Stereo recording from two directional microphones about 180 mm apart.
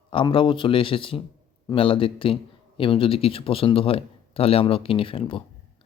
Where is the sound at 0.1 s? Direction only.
30° left (ahead or behind).